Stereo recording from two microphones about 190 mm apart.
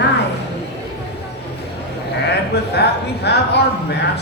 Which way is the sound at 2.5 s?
60° left (ahead or behind).